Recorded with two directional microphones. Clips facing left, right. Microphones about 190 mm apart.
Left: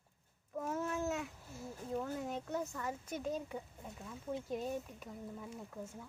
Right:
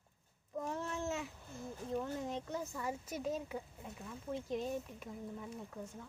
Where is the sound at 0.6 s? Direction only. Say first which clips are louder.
Left 2 dB; 5° left (ahead or behind).